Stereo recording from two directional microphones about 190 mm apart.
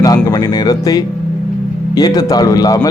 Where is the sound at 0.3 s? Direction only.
20° left (ahead or behind).